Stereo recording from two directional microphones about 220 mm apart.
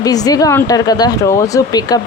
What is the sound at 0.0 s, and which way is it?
Speech, 15° left (ahead or behind).